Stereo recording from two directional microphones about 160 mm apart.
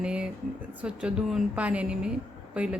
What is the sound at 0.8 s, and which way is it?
A woman's voice, 5° right (ahead or behind).